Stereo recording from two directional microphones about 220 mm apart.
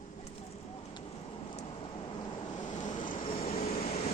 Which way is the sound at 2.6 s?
35° left (ahead or behind).